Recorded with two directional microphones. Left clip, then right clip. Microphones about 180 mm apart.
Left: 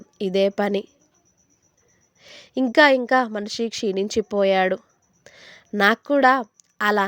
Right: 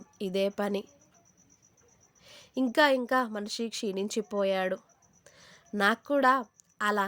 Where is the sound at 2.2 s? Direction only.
45° left (ahead or behind).